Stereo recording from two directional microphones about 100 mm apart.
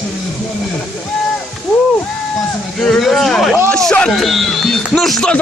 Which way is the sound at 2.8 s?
Centre (ahead or behind).